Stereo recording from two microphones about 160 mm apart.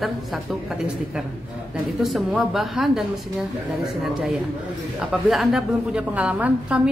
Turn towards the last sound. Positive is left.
turn(degrees=-5)  # may be behind; listen again after turning